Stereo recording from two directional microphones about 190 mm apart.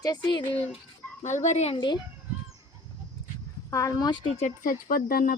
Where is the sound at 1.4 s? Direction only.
35° left (ahead or behind).